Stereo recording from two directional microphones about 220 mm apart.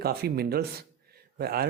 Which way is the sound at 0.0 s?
45° right (ahead or behind).